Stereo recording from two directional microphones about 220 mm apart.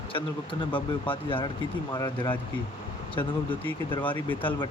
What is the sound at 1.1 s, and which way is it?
Speech, 20° left (ahead or behind).